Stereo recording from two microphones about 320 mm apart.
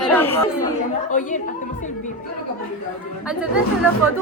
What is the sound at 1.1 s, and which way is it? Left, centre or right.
Speech, left.